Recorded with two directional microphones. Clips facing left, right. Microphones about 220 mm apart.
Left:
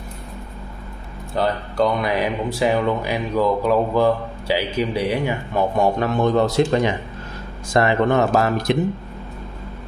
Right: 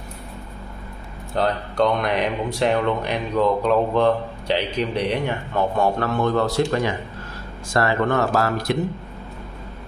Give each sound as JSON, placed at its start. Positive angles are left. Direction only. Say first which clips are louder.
{"t": 1.3, "sound": "a man's voice", "louder": "left 1 dB", "side_deg": 0}